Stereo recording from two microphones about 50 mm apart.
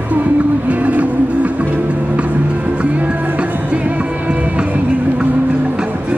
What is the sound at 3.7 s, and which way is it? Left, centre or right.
Music, right.